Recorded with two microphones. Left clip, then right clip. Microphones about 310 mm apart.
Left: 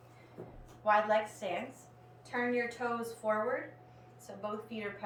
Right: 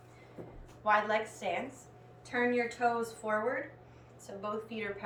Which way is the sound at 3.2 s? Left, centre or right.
Centre.